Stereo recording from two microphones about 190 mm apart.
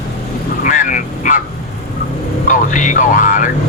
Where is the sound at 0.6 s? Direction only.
40° left (ahead or behind).